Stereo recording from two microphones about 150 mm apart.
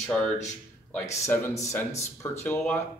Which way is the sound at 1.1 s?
15° left (ahead or behind).